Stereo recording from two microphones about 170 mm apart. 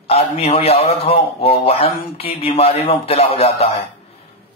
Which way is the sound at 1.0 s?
35° left (ahead or behind).